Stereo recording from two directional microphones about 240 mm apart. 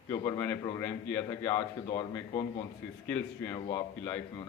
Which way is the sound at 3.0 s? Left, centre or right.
Centre.